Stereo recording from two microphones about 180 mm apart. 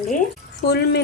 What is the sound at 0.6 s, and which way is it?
Speech, 65° left (ahead or behind).